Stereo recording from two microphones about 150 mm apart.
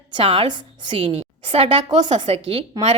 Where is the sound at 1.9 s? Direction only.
30° right (ahead or behind).